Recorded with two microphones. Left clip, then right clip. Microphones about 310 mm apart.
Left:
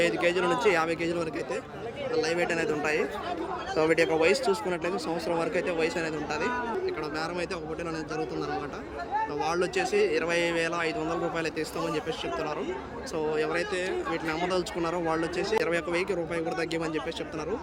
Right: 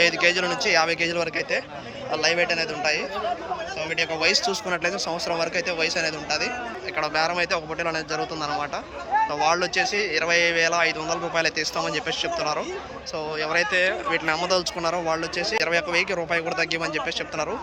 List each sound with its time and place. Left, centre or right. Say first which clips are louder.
0.0 s a man's voice: right 5 dB; centre